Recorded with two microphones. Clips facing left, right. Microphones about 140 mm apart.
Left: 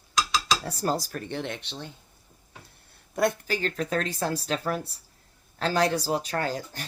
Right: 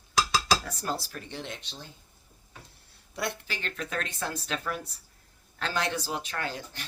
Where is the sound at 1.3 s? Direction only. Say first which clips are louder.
Left 6 dB; 60° left (ahead or behind).